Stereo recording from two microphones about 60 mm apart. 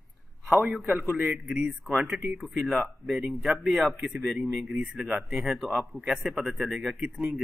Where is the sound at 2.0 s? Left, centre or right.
Right.